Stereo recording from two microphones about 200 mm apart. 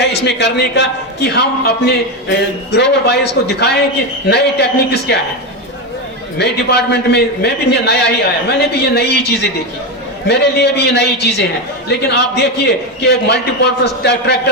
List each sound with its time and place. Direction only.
0.0 s a man's voice: 60° left (ahead or behind)
6.4 s a man's voice: 55° left (ahead or behind)